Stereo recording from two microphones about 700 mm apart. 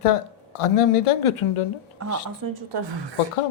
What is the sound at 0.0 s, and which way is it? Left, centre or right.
Speech, left.